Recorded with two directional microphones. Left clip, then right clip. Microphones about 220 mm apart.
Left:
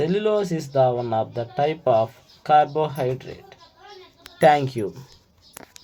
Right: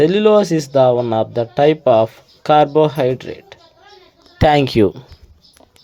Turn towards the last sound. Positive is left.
turn(degrees=-40)  # may be behind; listen again after turning